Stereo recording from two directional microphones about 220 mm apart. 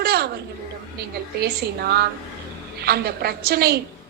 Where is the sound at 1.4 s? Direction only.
45° right (ahead or behind).